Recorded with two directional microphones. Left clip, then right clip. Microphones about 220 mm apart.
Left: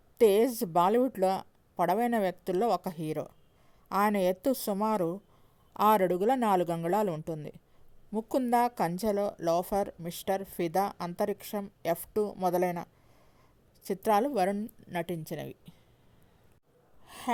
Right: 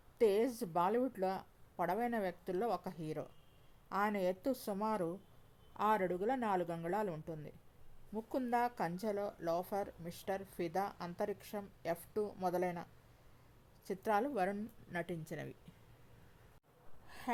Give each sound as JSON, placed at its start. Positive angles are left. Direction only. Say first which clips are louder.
{"t": 0.2, "sound": "a woman's voice", "louder": "left 9 dB", "side_deg": 35}
{"t": 17.1, "sound": "gasp", "louder": "left 8 dB", "side_deg": 30}